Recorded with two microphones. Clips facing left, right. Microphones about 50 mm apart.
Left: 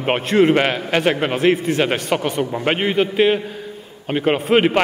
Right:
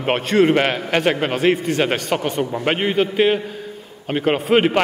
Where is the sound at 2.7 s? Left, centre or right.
Left.